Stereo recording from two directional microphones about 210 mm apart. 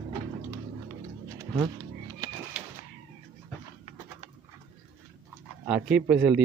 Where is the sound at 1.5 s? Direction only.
20° right (ahead or behind).